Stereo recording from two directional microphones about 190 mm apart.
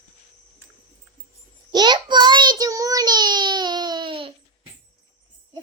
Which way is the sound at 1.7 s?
20° right (ahead or behind).